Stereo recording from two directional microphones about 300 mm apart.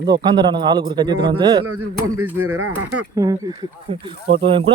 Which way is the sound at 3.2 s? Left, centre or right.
Centre.